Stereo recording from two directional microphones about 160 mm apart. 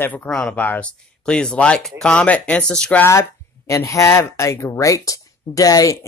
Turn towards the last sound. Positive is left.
turn(degrees=20)  # may be behind; listen again after turning